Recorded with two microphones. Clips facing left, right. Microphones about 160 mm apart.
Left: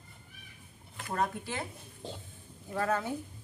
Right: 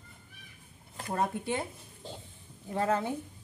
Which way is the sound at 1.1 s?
25° right (ahead or behind).